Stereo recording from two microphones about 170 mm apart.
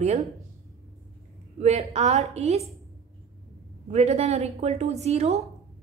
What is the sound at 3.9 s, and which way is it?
A woman's voice, 40° right (ahead or behind).